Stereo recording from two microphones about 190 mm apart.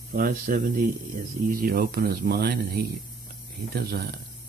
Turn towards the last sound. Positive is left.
turn(degrees=-55)  # may be behind; listen again after turning